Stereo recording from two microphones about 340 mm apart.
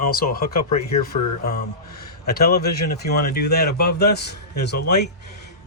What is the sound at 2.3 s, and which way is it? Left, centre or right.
Speech, left.